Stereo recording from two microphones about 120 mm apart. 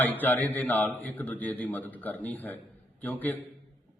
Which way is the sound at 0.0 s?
15° left (ahead or behind).